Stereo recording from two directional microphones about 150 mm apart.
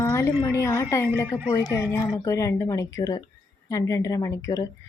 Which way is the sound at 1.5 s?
20° left (ahead or behind).